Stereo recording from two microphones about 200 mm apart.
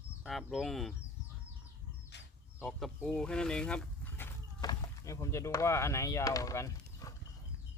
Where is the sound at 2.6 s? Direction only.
5° left (ahead or behind).